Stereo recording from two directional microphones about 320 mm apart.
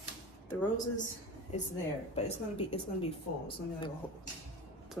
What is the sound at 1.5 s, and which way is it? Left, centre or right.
Speech, left.